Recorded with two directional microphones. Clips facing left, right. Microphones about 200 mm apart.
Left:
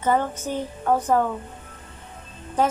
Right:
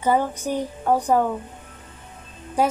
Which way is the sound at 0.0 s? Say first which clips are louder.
Right 1 dB; 10° right (ahead or behind).